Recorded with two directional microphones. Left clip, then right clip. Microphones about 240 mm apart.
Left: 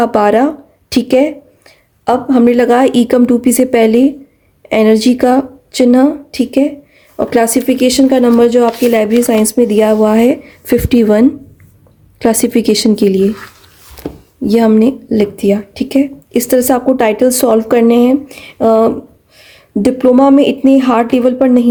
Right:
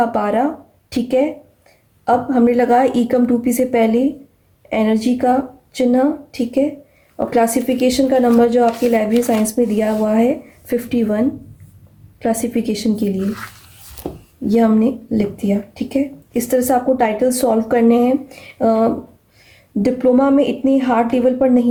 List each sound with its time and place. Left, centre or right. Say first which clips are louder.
0.0 s a woman's voice: left 7 dB; left
14.4 s speech: left 6 dB; left